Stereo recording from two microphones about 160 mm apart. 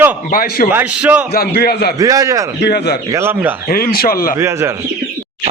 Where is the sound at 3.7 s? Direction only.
65° left (ahead or behind).